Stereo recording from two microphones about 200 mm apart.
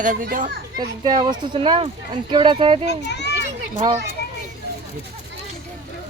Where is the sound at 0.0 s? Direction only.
40° right (ahead or behind).